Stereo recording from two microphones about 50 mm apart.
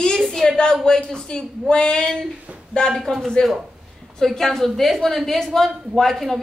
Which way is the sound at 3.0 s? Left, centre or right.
Centre.